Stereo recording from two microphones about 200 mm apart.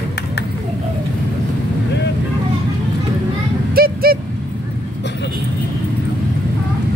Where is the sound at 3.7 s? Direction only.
50° right (ahead or behind).